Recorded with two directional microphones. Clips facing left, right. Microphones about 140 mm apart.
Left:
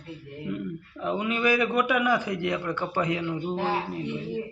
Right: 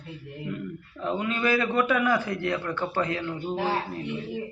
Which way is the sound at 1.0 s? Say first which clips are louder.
Left 1 dB; 15° left (ahead or behind).